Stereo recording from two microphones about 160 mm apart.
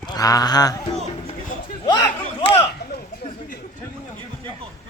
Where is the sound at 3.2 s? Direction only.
60° left (ahead or behind).